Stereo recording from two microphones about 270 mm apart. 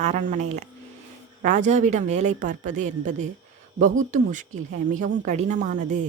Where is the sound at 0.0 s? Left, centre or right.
Right.